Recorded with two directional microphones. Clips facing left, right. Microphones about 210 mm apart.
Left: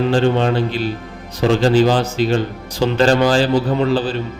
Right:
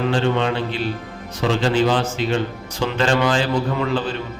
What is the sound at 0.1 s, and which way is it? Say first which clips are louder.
Speech: left 4 dB; 40° left (ahead or behind).